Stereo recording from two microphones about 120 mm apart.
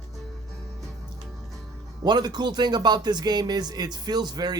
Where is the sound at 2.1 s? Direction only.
35° right (ahead or behind).